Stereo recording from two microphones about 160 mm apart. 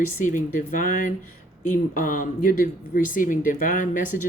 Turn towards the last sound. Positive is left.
turn(degrees=55)  # may be behind; listen again after turning